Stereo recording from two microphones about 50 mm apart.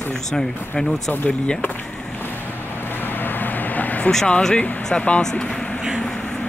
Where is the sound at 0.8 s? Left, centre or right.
Centre.